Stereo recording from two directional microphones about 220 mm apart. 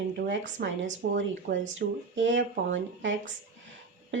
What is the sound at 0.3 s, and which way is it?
Speech, 55° right (ahead or behind).